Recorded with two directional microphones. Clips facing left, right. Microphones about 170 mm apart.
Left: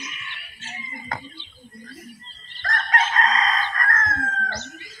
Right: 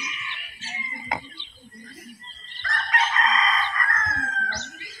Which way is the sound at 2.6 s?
50° left (ahead or behind).